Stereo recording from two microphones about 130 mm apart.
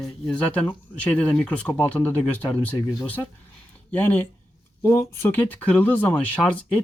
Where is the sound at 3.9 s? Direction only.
10° left (ahead or behind).